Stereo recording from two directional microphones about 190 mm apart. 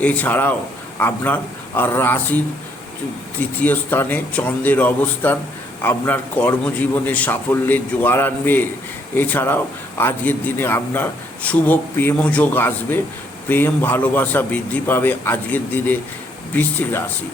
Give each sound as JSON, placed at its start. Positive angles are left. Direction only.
{"t": 0.0, "sound": "a man's voice", "side_deg": 10}
{"t": 3.6, "sound": "a man's voice", "side_deg": 10}